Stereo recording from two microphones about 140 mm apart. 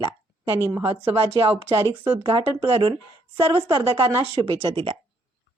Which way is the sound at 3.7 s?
35° right (ahead or behind).